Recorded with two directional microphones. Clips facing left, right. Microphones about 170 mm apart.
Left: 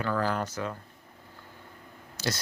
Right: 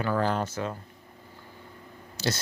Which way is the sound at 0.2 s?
25° right (ahead or behind).